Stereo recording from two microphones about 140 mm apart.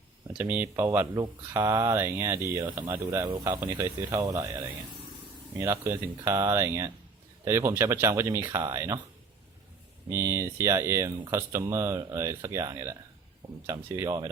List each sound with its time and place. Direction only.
0.3 s speech: 10° right (ahead or behind)
10.1 s speech: 20° right (ahead or behind)